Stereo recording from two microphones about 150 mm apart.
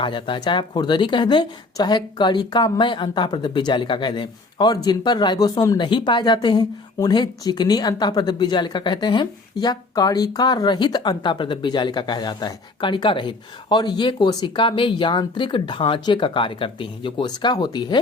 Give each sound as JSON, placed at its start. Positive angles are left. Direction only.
{"t": 0.0, "sound": "speech", "side_deg": 35}